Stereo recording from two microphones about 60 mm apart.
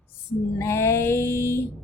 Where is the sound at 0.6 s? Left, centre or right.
Left.